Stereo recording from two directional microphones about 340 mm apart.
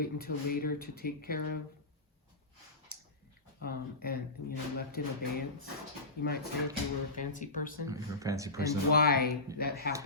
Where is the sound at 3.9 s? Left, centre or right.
Left.